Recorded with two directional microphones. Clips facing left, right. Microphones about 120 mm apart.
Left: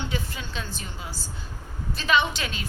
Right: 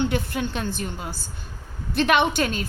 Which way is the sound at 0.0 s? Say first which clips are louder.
Right 8 dB; 60° right (ahead or behind).